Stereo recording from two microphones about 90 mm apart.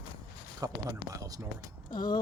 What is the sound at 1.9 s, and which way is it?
Speech, 55° left (ahead or behind).